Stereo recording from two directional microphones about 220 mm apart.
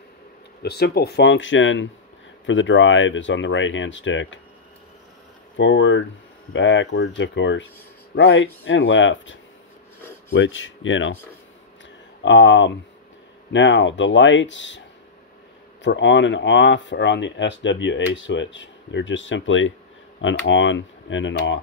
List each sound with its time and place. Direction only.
0.6 s speech: 45° left (ahead or behind)
5.6 s speech: 55° left (ahead or behind)
12.2 s speech: 55° left (ahead or behind)
15.8 s speech: 55° left (ahead or behind)